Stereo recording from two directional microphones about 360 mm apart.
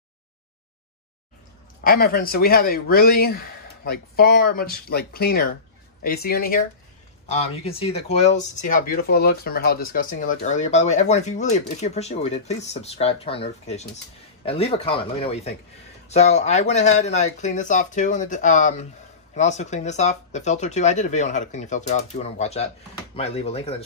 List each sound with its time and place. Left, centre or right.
1.8 s speech: left